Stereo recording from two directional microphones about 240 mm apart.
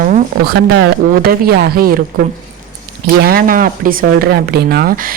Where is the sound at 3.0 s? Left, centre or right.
Right.